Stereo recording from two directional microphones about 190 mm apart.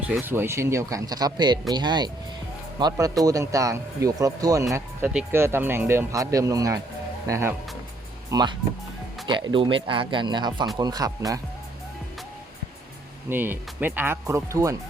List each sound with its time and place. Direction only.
0.1 s speech: 10° right (ahead or behind)
13.3 s speech: 10° right (ahead or behind)